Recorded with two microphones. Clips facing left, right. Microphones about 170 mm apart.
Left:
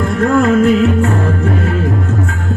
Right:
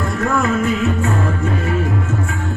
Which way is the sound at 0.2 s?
55° left (ahead or behind).